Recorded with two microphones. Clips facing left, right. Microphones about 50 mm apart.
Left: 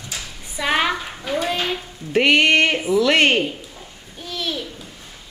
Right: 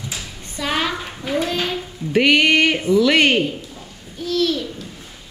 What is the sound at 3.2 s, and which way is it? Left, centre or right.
Speech, centre.